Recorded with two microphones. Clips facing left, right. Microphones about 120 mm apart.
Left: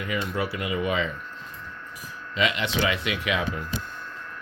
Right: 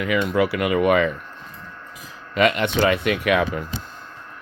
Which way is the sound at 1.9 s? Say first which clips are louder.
Right 2 dB; 90° right.